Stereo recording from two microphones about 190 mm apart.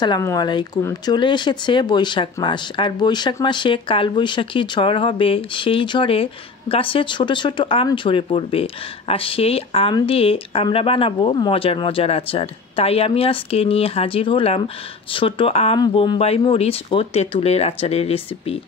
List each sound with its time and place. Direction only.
0.0 s speech: 20° left (ahead or behind)